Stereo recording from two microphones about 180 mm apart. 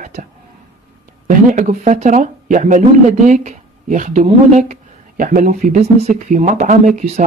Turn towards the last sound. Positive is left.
turn(degrees=-40)  # may be behind; listen again after turning